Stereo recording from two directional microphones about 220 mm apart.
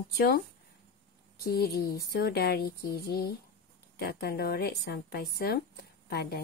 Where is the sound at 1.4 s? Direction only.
45° left (ahead or behind).